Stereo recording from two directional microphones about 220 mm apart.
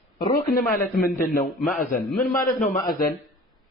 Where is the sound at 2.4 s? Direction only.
35° left (ahead or behind).